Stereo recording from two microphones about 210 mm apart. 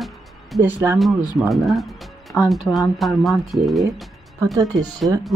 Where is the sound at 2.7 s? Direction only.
Centre (ahead or behind).